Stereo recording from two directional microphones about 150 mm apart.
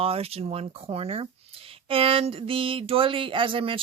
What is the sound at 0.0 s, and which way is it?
Speech, 40° right (ahead or behind).